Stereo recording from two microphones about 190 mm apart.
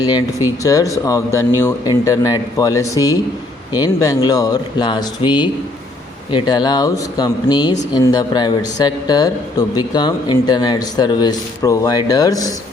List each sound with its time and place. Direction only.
0.0 s speech: 20° left (ahead or behind)